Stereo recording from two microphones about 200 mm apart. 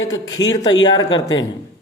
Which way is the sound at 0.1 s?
20° left (ahead or behind).